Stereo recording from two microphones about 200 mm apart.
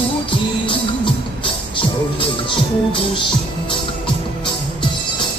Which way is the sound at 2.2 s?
25° left (ahead or behind).